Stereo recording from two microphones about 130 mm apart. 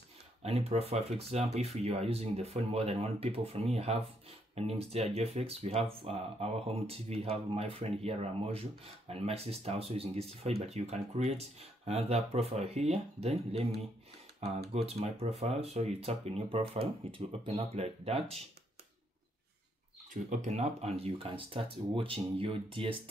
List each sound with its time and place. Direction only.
0.4 s speech: 55° right (ahead or behind)
20.2 s speech: 60° right (ahead or behind); by 22.9 s 45° right (ahead or behind)